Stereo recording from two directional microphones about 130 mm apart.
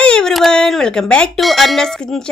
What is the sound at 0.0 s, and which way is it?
Speech, 5° left (ahead or behind).